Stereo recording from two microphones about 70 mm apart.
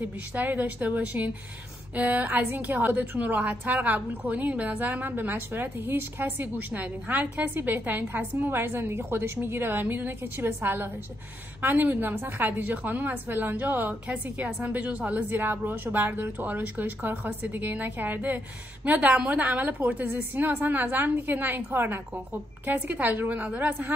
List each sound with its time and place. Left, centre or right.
0.3 s a woman's voice: right